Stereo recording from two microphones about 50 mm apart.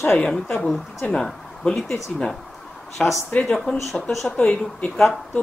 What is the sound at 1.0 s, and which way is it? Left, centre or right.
Speech, centre.